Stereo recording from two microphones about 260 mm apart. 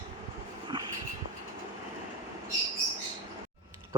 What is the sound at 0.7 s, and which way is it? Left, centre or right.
Vehicle, centre.